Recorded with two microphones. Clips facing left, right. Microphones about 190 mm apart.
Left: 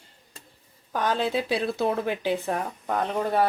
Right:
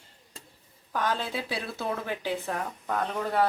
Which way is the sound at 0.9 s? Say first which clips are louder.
Left 5 dB; 15° left (ahead or behind).